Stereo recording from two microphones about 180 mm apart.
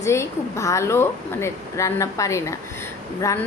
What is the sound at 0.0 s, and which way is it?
A woman's voice, 15° left (ahead or behind).